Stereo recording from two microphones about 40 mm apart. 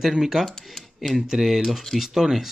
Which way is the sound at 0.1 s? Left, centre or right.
Centre.